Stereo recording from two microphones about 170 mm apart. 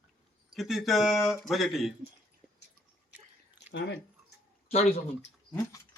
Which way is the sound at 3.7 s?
85° left.